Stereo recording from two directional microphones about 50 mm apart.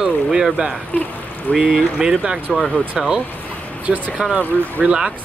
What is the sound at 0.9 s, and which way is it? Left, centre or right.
Speech, left.